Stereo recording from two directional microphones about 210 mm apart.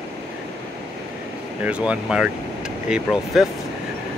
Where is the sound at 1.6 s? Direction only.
5° right (ahead or behind).